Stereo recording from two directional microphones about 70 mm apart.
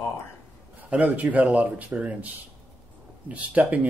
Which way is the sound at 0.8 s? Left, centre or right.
Right.